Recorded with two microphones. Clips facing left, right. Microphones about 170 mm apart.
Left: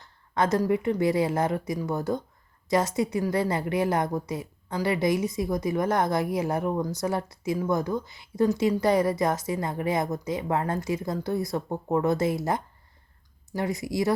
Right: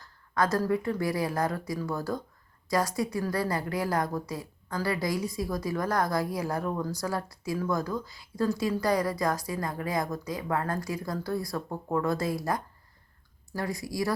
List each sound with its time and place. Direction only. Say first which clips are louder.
0.0 s a woman's voice: left 2 dB; 20° left (ahead or behind)